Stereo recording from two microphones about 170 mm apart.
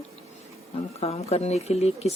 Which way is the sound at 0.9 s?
35° left (ahead or behind).